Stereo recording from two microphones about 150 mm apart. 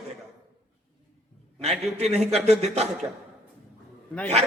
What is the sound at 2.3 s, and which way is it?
Speech, 45° right (ahead or behind).